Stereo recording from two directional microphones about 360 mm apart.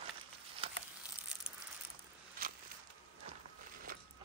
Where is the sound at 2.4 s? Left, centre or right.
Right.